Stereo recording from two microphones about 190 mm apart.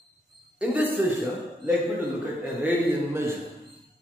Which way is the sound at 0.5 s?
10° right (ahead or behind).